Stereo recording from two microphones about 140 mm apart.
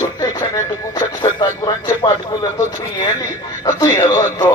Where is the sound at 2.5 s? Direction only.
25° left (ahead or behind).